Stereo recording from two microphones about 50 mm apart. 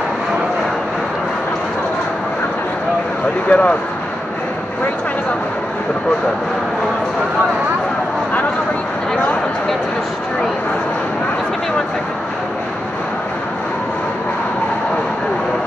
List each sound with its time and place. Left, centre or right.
3.4 s speech: left